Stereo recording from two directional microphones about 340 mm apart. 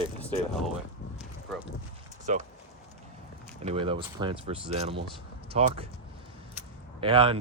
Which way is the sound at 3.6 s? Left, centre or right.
Centre.